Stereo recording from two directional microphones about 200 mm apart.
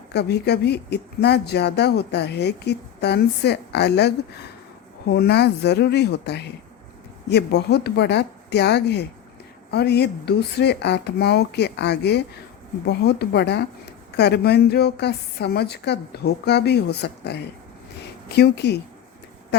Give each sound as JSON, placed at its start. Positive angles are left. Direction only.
{"t": 0.1, "sound": "speech", "side_deg": 55}
{"t": 5.1, "sound": "speech", "side_deg": 55}